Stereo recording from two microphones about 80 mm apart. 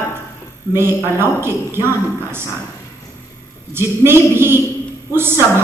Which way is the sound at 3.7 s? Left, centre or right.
Right.